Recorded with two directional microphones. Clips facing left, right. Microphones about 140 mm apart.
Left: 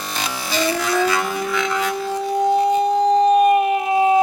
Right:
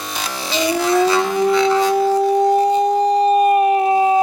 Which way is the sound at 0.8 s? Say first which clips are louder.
Right 4 dB; 30° right (ahead or behind).